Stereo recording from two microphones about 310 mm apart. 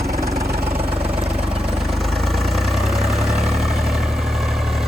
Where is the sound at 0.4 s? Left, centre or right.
Right.